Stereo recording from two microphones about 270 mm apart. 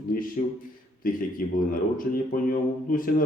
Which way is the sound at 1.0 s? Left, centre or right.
Left.